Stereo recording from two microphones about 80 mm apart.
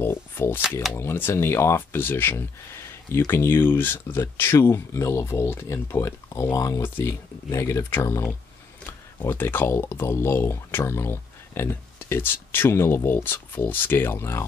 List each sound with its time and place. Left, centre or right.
0.0 s music: left
0.9 s speech: left
9.3 s speech: left